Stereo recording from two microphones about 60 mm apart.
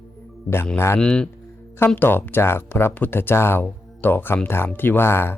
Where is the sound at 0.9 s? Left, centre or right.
Centre.